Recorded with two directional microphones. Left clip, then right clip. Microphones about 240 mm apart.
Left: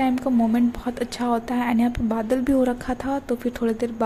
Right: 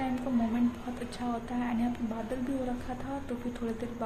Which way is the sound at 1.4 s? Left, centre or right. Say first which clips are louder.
Left 10 dB; left.